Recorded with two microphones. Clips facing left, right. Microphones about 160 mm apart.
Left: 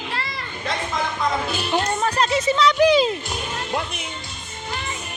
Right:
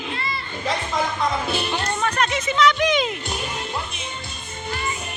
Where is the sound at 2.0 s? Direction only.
30° left (ahead or behind).